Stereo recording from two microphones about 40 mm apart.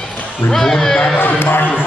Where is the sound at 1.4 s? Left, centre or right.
Left.